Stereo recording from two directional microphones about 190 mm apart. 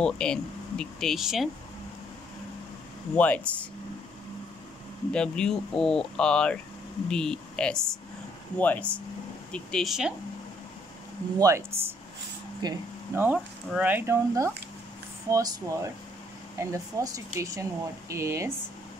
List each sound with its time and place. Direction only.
0.0 s speech: 5° left (ahead or behind)
3.2 s speech: 10° left (ahead or behind)
5.1 s speech: 5° left (ahead or behind)
11.3 s speech: 15° right (ahead or behind)